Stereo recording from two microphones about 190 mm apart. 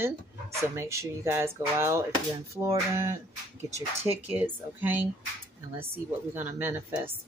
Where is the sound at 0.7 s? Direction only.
15° right (ahead or behind).